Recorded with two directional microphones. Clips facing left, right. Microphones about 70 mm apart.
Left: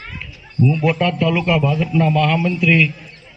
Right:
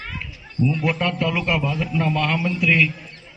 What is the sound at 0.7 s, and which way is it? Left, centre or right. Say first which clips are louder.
A man's voice: left 5 dB; centre.